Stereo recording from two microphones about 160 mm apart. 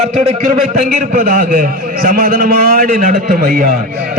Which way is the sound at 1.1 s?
65° right (ahead or behind).